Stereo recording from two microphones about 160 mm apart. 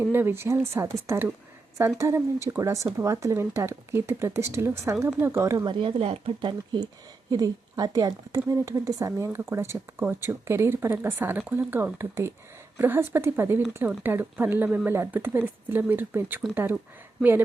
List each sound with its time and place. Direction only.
0.0 s a woman's voice: 15° right (ahead or behind)
5.8 s speech: 35° right (ahead or behind)
7.3 s a woman's voice: 25° right (ahead or behind)